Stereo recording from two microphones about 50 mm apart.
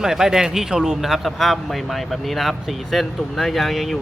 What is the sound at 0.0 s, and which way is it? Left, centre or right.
A man's voice, centre.